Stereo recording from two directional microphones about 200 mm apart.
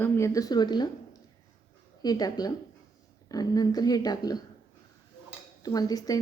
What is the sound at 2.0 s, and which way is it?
Speech, 20° left (ahead or behind).